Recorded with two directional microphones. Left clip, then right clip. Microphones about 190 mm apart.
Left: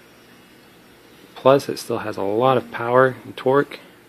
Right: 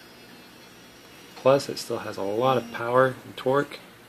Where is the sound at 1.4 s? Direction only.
40° left (ahead or behind).